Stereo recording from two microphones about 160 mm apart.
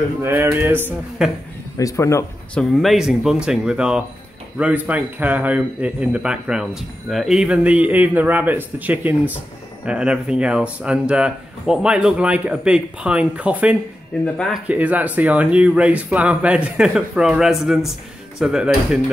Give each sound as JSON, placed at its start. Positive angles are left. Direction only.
{"t": 0.2, "sound": "a man's voice", "side_deg": -15}
{"t": 1.8, "sound": "speech", "side_deg": 20}
{"t": 2.5, "sound": "a man's voice", "side_deg": 0}
{"t": 14.2, "sound": "speech", "side_deg": 5}
{"t": 14.7, "sound": "a man's voice", "side_deg": -10}